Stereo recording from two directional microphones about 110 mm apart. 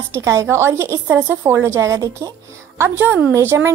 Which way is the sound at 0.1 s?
25° right (ahead or behind).